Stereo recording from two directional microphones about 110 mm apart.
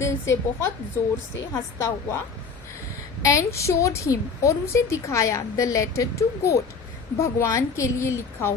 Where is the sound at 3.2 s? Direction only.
30° left (ahead or behind).